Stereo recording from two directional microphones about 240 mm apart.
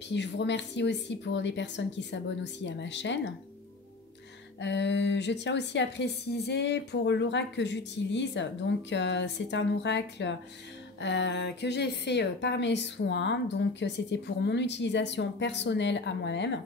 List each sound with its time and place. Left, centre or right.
0.1 s a woman's voice: left
4.6 s a woman's voice: left